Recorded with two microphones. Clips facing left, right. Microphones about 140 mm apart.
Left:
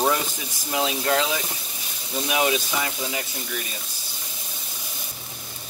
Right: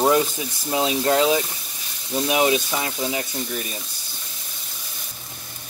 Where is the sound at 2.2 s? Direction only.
30° right (ahead or behind).